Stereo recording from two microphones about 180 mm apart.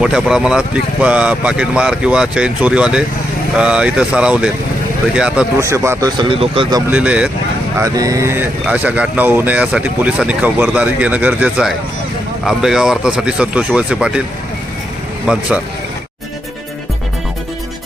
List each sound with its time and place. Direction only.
0.0 s speech: 5° right (ahead or behind); by 6.8 s 25° right (ahead or behind)
6.9 s speech: 5° right (ahead or behind)
7.8 s speech: 20° right (ahead or behind)
15.3 s speech: 5° right (ahead or behind)